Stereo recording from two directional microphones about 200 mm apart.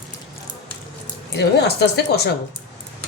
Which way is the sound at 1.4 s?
55° left (ahead or behind).